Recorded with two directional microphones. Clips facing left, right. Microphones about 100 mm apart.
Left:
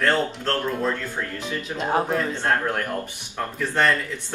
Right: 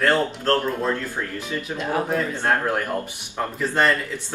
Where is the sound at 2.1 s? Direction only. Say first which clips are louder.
Right 1 dB; 15° right (ahead or behind).